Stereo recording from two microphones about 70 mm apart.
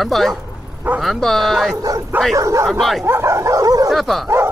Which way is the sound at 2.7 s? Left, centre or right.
Centre.